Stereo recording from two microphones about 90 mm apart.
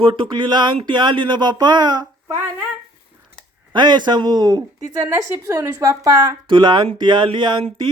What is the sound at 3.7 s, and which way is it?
Speech, 55° right (ahead or behind).